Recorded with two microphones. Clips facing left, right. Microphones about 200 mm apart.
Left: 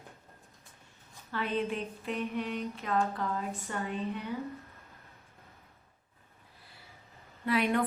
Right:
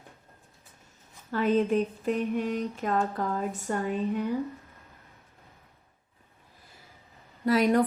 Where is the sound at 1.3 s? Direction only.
45° right (ahead or behind).